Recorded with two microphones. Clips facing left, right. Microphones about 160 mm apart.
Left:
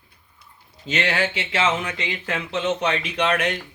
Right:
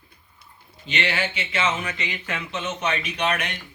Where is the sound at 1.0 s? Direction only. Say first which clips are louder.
Left 3 dB; 90° left.